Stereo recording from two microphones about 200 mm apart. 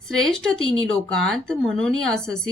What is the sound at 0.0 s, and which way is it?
Speech, centre (ahead or behind).